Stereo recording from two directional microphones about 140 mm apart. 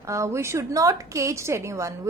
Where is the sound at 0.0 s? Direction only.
20° right (ahead or behind).